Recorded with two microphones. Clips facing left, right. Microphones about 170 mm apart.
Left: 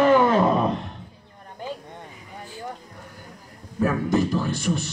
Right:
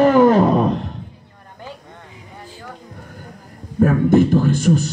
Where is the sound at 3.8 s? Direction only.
55° right (ahead or behind).